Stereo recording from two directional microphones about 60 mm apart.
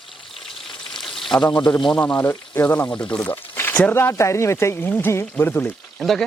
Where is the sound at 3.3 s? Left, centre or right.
Left.